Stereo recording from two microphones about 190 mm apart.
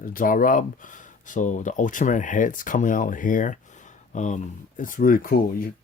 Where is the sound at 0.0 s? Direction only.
45° left (ahead or behind).